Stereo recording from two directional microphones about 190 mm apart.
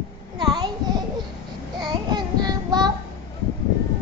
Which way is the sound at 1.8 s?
25° right (ahead or behind).